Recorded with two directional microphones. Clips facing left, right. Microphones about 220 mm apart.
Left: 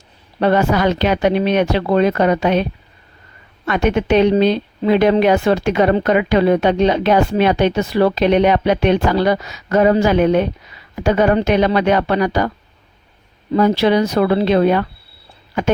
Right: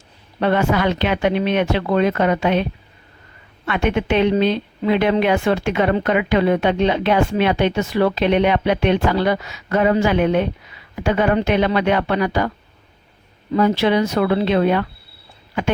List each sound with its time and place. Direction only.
0.3 s a woman's voice: 40° left (ahead or behind)
3.7 s a woman's voice: 40° left (ahead or behind)
13.5 s a woman's voice: 40° left (ahead or behind)